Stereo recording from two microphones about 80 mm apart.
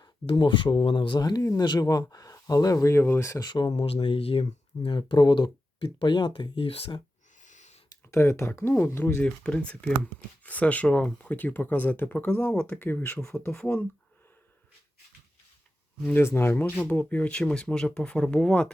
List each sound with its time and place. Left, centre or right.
0.0 s speech: left
3.4 s speech: left
4.9 s speech: left
8.1 s speech: left
9.1 s speech: centre
13.6 s speech: centre
16.0 s speech: left; by 18.7 s centre